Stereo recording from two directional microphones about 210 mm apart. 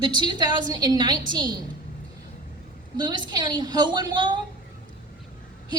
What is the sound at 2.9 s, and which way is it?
A woman's voice, 20° right (ahead or behind).